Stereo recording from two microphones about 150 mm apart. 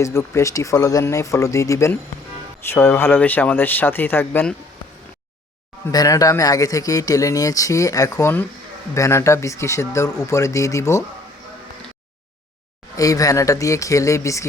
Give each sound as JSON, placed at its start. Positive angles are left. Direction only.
{"t": 0.0, "sound": "a man's voice", "side_deg": 20}
{"t": 5.9, "sound": "a man's voice", "side_deg": 25}
{"t": 13.0, "sound": "a man's voice", "side_deg": 25}